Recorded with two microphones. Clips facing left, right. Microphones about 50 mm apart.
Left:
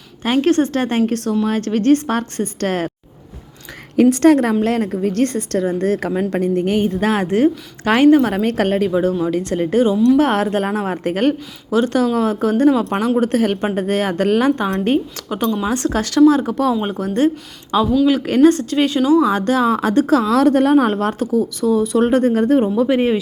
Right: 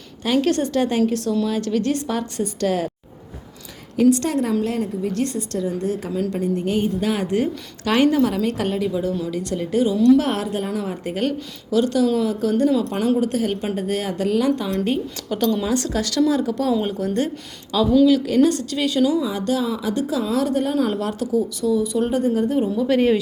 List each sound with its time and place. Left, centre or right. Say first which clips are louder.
0.3 s a woman's voice: left 4 dB; left
4.1 s a woman's voice: left 7 dB; left
12.8 s a woman's voice: left 3 dB; left
15.3 s speech: left 1 dB; left
15.7 s a woman's voice: left 4 dB; left
19.2 s a woman's voice: left 7 dB; left
22.9 s speech: left 1 dB; left